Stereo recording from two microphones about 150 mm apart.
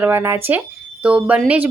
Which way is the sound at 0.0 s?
15° right (ahead or behind).